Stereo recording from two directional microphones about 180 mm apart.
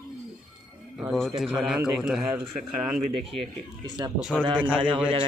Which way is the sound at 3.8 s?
25° right (ahead or behind).